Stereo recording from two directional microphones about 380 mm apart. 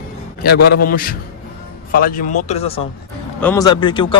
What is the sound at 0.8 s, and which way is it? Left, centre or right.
A man's voice, left.